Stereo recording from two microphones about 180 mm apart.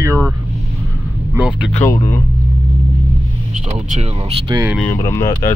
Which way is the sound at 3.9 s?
35° right (ahead or behind).